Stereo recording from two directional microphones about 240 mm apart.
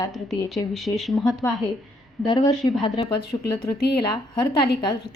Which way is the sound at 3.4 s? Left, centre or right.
Left.